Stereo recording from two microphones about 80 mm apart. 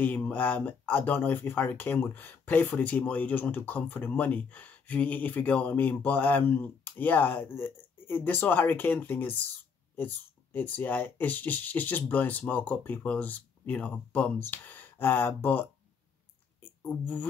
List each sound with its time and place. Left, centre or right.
0.0 s speech: left
16.9 s speech: left